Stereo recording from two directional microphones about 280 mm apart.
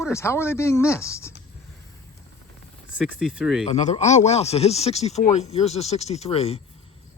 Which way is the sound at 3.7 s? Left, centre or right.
Left.